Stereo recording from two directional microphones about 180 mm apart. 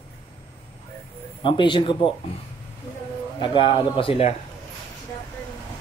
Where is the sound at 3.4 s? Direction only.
25° left (ahead or behind).